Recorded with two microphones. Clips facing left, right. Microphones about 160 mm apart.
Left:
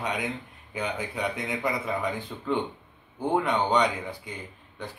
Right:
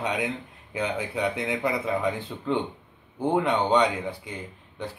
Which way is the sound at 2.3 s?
5° right (ahead or behind).